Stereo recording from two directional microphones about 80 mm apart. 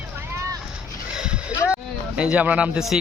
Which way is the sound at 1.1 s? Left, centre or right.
Centre.